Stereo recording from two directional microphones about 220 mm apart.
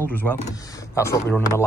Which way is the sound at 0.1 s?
5° left (ahead or behind).